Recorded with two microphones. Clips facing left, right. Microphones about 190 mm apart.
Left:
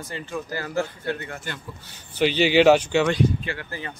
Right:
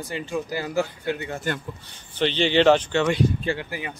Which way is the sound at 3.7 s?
10° right (ahead or behind).